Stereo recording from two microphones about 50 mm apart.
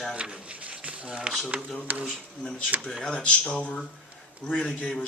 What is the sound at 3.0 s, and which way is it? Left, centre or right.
Speech, left.